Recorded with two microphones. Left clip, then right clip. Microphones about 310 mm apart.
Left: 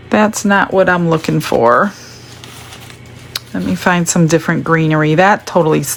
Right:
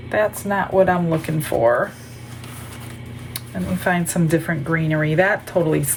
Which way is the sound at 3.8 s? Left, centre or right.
Centre.